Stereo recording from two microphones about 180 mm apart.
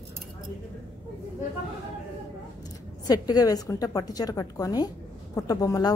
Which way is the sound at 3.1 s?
20° left (ahead or behind).